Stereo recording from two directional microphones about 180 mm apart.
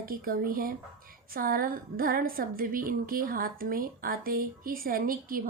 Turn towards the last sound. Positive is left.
turn(degrees=-50)  # may be behind; listen again after turning